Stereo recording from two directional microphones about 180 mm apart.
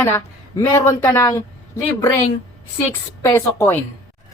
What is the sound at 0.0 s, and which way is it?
Speech, 15° left (ahead or behind).